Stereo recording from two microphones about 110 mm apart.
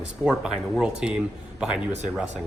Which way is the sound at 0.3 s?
5° right (ahead or behind).